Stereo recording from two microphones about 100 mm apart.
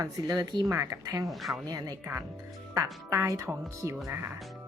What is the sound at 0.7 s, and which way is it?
Speech, 30° right (ahead or behind).